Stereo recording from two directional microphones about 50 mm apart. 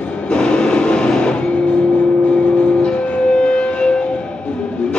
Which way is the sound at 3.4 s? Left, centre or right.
Centre.